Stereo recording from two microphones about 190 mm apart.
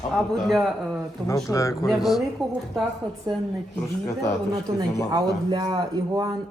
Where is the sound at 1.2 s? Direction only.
15° left (ahead or behind).